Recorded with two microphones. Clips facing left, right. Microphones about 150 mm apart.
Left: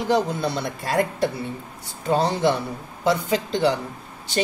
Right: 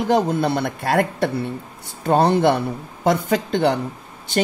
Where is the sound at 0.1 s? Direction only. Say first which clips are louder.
Right 3 dB; 55° right (ahead or behind).